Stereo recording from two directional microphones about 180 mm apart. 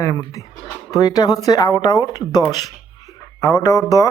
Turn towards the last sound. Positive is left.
turn(degrees=20)  # may be behind; listen again after turning